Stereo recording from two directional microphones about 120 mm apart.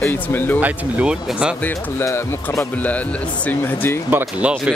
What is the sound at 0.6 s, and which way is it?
Speech, 10° right (ahead or behind).